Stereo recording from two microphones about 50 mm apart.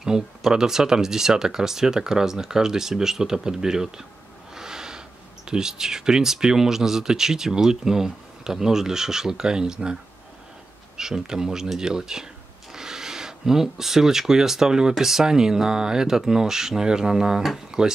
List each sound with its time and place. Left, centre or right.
0.0 s speech: centre
4.6 s snort: centre
5.5 s speech: centre
11.0 s speech: centre